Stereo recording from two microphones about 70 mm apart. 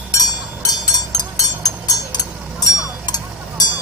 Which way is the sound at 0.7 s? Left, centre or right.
Left.